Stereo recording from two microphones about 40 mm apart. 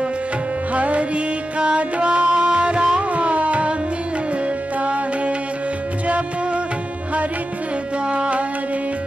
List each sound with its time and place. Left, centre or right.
0.7 s music: right
3.0 s tabla: right
4.8 s music: right
8.1 s music: right